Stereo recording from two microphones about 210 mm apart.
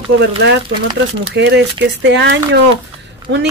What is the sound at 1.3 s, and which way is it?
Speech, 55° right (ahead or behind).